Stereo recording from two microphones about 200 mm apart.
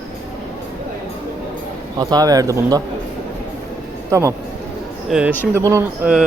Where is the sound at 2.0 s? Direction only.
20° right (ahead or behind).